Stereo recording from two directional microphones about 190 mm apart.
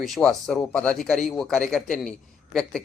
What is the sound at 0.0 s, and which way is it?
A man's voice, centre (ahead or behind).